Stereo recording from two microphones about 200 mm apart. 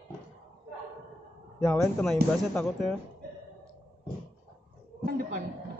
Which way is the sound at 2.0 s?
5° left (ahead or behind).